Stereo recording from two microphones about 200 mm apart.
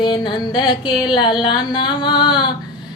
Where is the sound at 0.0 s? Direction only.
25° left (ahead or behind).